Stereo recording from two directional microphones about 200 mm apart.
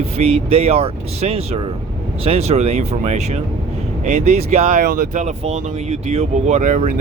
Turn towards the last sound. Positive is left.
turn(degrees=-35)  # may be behind; listen again after turning